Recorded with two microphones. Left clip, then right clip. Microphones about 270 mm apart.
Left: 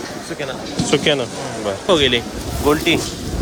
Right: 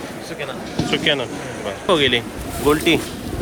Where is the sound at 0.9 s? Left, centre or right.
Centre.